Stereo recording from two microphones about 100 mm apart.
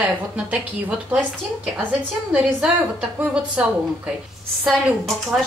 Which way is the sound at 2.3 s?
10° right (ahead or behind).